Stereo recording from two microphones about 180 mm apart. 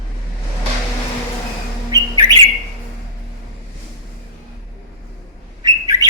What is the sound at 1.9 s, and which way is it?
Bird, 20° right (ahead or behind).